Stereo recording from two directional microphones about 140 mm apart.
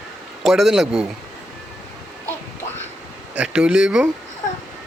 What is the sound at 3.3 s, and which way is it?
Mantra, 5° right (ahead or behind).